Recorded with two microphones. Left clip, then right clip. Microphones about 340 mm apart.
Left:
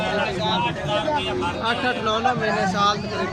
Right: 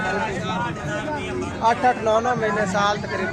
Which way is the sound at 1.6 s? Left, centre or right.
Centre.